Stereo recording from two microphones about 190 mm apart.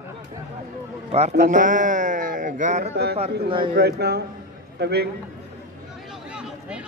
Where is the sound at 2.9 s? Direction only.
60° right (ahead or behind).